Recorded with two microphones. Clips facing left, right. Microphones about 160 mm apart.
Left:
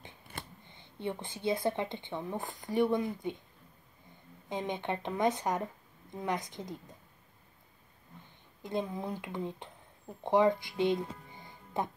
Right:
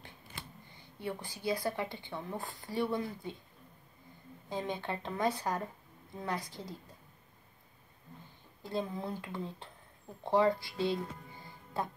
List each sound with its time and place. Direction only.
0.3 s a sound: 55° left (ahead or behind)
0.7 s speech: 25° left (ahead or behind)
4.5 s speech: 20° left (ahead or behind)
8.6 s speech: 15° left (ahead or behind)